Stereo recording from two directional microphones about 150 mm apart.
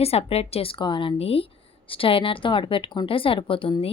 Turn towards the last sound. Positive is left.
turn(degrees=35)  # may be behind; listen again after turning